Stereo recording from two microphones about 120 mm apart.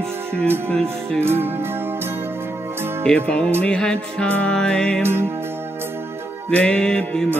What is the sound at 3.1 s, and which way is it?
Music, 10° left (ahead or behind).